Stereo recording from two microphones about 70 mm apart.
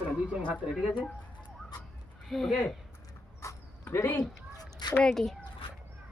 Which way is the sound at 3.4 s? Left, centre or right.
Left.